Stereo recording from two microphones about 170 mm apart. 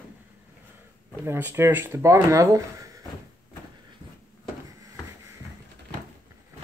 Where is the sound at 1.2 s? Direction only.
15° right (ahead or behind).